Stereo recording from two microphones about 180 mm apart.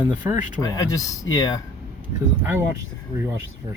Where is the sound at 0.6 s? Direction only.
20° left (ahead or behind).